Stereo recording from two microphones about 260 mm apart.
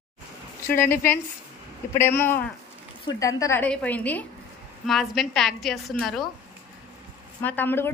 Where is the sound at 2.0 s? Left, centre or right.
Centre.